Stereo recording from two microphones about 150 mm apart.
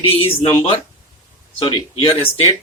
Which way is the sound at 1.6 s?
30° left (ahead or behind).